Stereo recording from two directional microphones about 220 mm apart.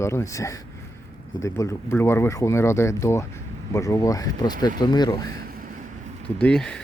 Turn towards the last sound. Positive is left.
turn(degrees=5)  # may be behind; listen again after turning